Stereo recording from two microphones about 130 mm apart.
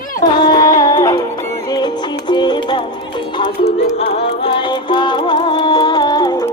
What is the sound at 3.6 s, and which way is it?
Music, 50° left (ahead or behind).